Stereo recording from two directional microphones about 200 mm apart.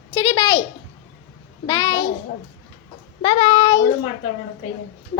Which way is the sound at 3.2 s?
25° left (ahead or behind).